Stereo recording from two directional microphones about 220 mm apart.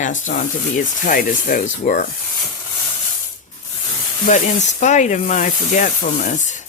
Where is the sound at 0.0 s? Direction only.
35° left (ahead or behind).